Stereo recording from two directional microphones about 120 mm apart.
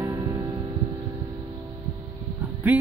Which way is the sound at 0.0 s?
25° right (ahead or behind).